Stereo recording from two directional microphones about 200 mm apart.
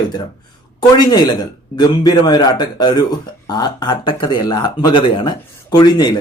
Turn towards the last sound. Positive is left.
turn(degrees=20)  # may be behind; listen again after turning